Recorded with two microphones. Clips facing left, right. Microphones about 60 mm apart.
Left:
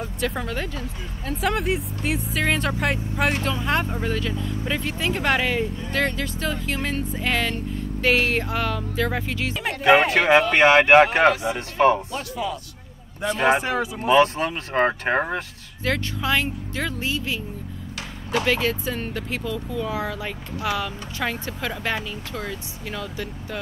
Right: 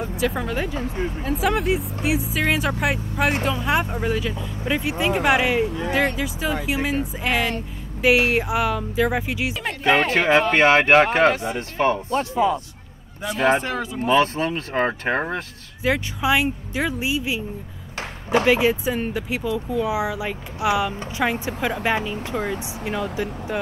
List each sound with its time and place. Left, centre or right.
0.0 s speech: centre
9.7 s speech: centre
12.1 s speech: right
13.2 s speech: centre
15.8 s speech: centre